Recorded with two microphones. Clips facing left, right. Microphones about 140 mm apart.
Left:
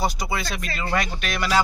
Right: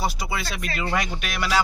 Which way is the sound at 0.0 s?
5° right (ahead or behind).